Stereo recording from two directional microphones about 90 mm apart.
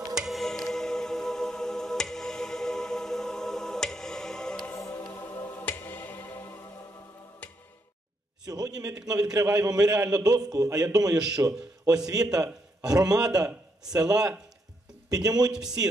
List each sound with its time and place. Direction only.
0.1 s music: 5° right (ahead or behind)
4.7 s music: 40° left (ahead or behind)
5.1 s music: 25° left (ahead or behind)
8.5 s a man's voice: 45° right (ahead or behind)
11.1 s a man's voice: 10° right (ahead or behind)
12.8 s a man's voice: 45° right (ahead or behind)